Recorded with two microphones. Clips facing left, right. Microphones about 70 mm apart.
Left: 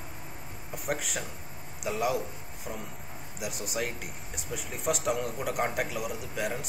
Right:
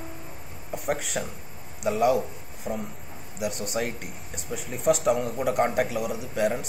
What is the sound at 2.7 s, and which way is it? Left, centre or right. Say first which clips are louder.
Speech: right 8 dB; right.